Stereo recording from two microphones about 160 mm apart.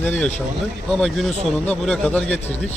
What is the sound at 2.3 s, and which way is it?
Speech, 40° left (ahead or behind).